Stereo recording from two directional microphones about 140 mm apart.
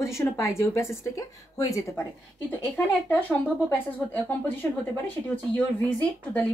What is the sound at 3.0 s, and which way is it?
Speech, 15° left (ahead or behind).